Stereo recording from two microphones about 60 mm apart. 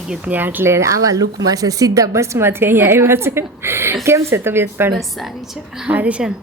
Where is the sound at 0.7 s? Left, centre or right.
Right.